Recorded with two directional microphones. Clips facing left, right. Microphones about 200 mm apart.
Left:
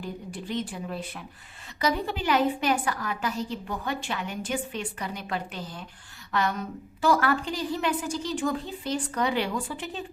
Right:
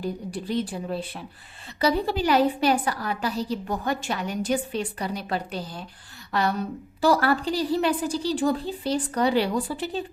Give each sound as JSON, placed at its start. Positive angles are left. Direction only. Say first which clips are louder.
{"t": 0.0, "sound": "a woman's voice", "louder": "right 6 dB", "side_deg": -35}